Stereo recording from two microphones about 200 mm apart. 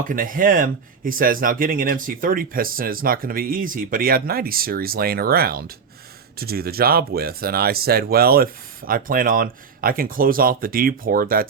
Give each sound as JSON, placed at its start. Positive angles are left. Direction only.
{"t": 0.1, "sound": "speech", "side_deg": -45}